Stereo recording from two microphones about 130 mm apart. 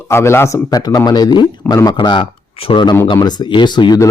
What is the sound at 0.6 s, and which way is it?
Speech, 30° left (ahead or behind).